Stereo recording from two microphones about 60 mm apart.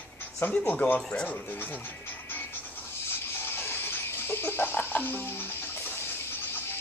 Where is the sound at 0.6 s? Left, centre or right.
Left.